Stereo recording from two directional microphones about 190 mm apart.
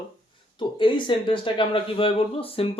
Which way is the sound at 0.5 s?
25° left (ahead or behind).